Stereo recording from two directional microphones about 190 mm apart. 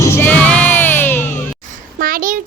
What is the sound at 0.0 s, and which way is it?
Music, 10° left (ahead or behind).